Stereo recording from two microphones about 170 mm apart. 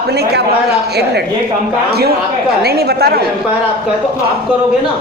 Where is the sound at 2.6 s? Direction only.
65° right (ahead or behind).